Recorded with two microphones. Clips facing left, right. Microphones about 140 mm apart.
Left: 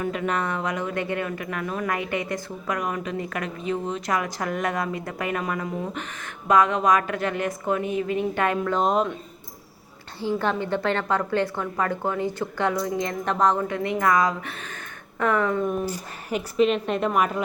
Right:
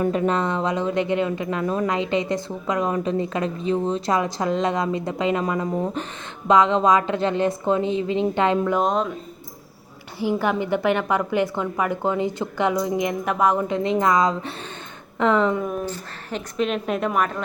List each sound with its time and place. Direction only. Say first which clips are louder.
0.0 s a woman's voice: right 5 dB; 30° right (ahead or behind)
5.7 s speech: right 5 dB; 35° right (ahead or behind)
6.5 s a woman's voice: right 3 dB; 25° right (ahead or behind)
8.8 s a woman's voice: even; centre (ahead or behind)
10.2 s a woman's voice: right 3 dB; 10° right (ahead or behind)
13.7 s a woman's voice: right 3 dB; 25° right (ahead or behind)
15.9 s a woman's voice: left 1 dB; 5° left (ahead or behind)